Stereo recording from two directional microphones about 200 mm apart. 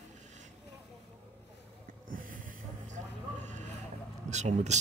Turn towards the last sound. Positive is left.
turn(degrees=-35)  # may be behind; listen again after turning